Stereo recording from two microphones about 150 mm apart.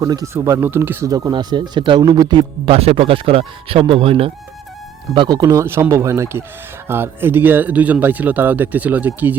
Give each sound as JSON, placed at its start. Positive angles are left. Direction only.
{"t": 0.0, "sound": "speech", "side_deg": -20}
{"t": 2.6, "sound": "speech", "side_deg": -40}